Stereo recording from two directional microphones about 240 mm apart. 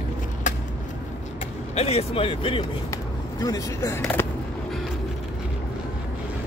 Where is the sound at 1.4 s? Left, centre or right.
Left; by 4.2 s centre.